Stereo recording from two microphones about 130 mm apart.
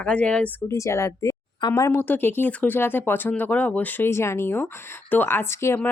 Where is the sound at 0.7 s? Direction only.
25° left (ahead or behind).